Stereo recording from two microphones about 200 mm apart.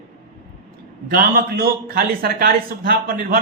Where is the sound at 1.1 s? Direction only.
50° right (ahead or behind).